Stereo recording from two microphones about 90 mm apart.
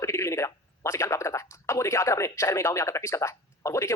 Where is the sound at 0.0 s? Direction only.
35° left (ahead or behind).